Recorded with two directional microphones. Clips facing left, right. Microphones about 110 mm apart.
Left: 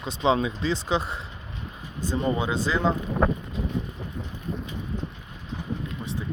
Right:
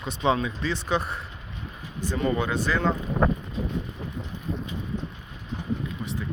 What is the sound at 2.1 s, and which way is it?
Speech, 20° left (ahead or behind).